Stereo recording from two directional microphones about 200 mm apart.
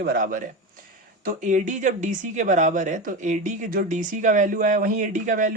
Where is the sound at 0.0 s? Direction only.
45° right (ahead or behind).